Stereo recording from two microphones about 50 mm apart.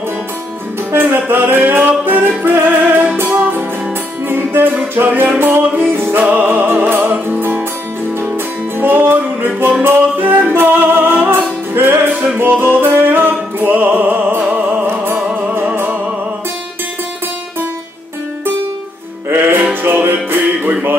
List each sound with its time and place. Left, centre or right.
1.1 s music: right
8.7 s music: right
15.2 s music: right
15.7 s music: right
19.2 s music: right